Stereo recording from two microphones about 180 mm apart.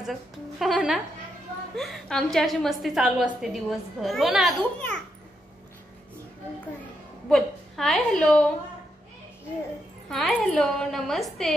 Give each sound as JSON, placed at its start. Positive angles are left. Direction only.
{"t": 0.0, "sound": "a woman's voice", "side_deg": 0}
{"t": 7.2, "sound": "a woman's voice", "side_deg": 0}
{"t": 10.0, "sound": "a woman's voice", "side_deg": 0}